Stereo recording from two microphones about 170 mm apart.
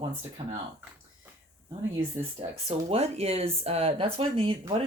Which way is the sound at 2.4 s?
35° right (ahead or behind).